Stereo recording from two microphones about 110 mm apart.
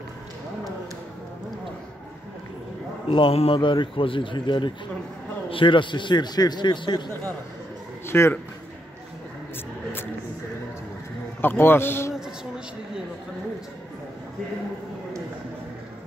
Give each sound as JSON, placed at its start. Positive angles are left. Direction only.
{"t": 3.1, "sound": "a man's voice", "side_deg": 60}
{"t": 8.1, "sound": "speech", "side_deg": 20}
{"t": 11.4, "sound": "a man's voice", "side_deg": 20}